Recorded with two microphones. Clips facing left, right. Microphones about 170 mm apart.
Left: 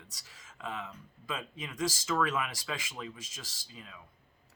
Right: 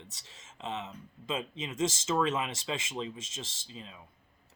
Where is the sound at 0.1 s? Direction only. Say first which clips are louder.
Right 2 dB; 25° right (ahead or behind).